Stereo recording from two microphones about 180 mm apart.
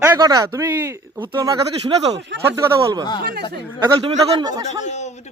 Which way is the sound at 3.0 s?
25° left (ahead or behind).